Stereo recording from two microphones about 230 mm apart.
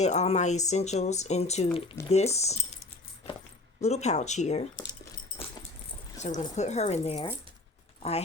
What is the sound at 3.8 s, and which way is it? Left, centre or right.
Speech, left.